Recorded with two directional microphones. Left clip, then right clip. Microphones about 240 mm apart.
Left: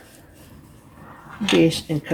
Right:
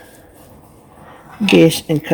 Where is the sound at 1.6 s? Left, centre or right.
Right.